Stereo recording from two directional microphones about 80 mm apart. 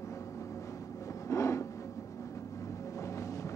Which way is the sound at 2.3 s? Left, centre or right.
Left.